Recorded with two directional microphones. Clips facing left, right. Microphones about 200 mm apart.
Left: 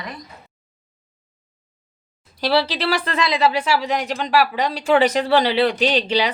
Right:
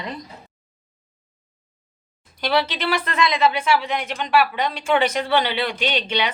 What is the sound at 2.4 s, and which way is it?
Speech, 30° left (ahead or behind).